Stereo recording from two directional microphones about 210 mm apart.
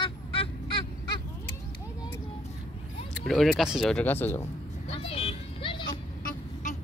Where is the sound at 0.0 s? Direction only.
25° left (ahead or behind).